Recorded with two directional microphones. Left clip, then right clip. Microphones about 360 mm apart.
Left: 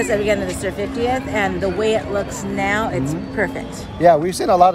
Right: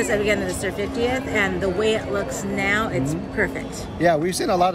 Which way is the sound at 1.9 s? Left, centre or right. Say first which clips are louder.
Left 3 dB; left.